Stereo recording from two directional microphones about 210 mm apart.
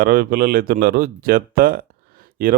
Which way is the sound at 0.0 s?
45° right (ahead or behind).